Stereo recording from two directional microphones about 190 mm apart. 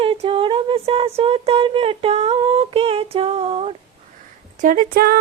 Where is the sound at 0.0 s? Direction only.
30° right (ahead or behind).